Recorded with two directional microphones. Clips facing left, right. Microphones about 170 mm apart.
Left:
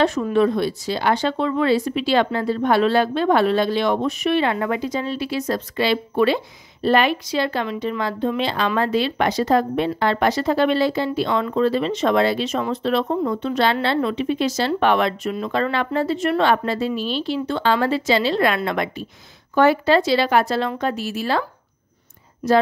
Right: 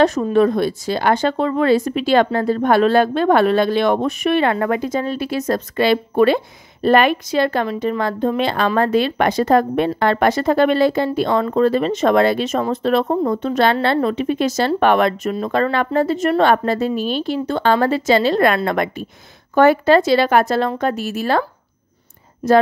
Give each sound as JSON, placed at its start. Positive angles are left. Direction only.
{"t": 0.0, "sound": "speech", "side_deg": -40}